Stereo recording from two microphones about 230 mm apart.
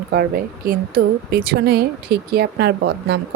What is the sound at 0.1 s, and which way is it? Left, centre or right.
Speech, right.